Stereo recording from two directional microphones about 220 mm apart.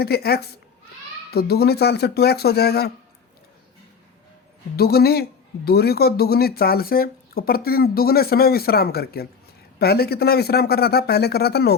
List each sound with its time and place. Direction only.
0.0 s speech: 45° left (ahead or behind)
4.8 s speech: 45° left (ahead or behind)